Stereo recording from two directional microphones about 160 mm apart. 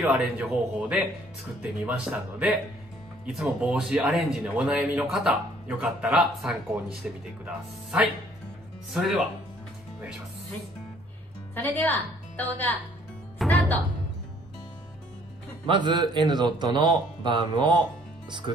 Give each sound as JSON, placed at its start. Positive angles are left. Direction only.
{"t": 0.0, "sound": "speech", "side_deg": -5}
{"t": 11.5, "sound": "a woman's voice", "side_deg": 10}
{"t": 13.4, "sound": "music", "side_deg": 5}
{"t": 15.6, "sound": "a man's voice", "side_deg": -30}